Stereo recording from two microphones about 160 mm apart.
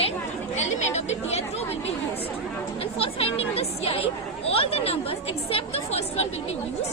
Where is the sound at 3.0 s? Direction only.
35° left (ahead or behind).